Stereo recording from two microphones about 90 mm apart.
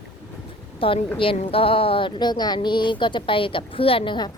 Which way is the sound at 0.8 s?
80° left.